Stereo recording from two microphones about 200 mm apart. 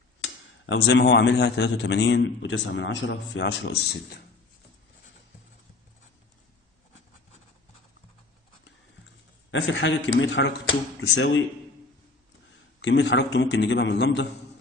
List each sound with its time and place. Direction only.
0.7 s a man's voice: 60° left (ahead or behind)
9.5 s speech: 65° left (ahead or behind)
12.8 s a man's voice: 60° left (ahead or behind)